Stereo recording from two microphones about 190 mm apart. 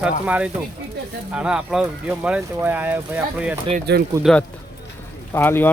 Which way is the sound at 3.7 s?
60° right (ahead or behind).